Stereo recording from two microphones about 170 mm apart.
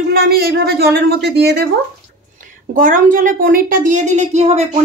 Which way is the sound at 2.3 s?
55° right (ahead or behind).